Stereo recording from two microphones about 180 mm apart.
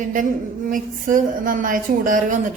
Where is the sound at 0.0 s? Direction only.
45° right (ahead or behind).